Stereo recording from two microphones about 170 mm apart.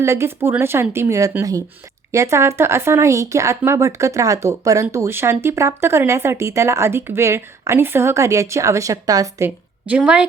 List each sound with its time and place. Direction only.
0.0 s speech: 15° right (ahead or behind)
9.8 s speech: 5° right (ahead or behind)